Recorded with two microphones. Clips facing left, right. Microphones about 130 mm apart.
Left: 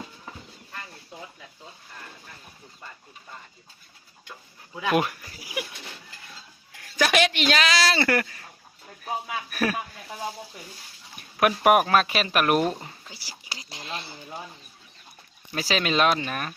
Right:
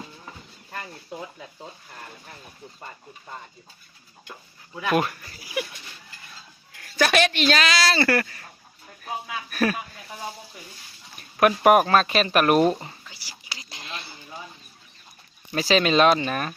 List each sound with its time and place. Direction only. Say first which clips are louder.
4.8 s speech: right 1 dB; 15° left (ahead or behind)
6.9 s speech: right 1 dB; 15° left (ahead or behind)
9.0 s a sound: left 1 dB; 10° left (ahead or behind)
11.3 s speech: right 2 dB; 5° left (ahead or behind)
13.1 s whispering: left 1 dB; 40° left (ahead or behind)
13.7 s a sound: left 3 dB; 35° left (ahead or behind)
15.5 s speech: right 5 dB; 5° left (ahead or behind)